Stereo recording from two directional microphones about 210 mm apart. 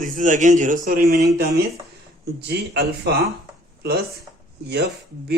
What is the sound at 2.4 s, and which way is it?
Speech, 50° right (ahead or behind).